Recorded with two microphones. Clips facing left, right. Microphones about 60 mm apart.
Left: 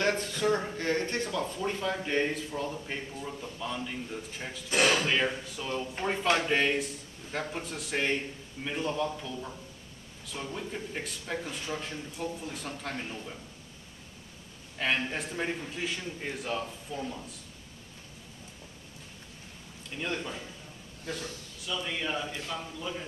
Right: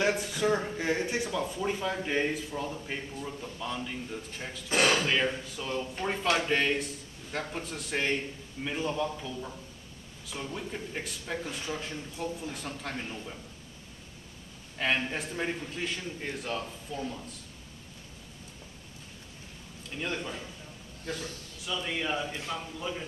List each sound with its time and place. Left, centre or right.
0.0 s a man's voice: centre
14.8 s a man's voice: centre
19.9 s a man's voice: centre
21.0 s a sound: centre
21.8 s speech: centre